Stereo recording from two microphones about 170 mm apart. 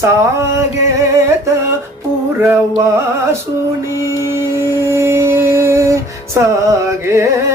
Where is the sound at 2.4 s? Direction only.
15° right (ahead or behind).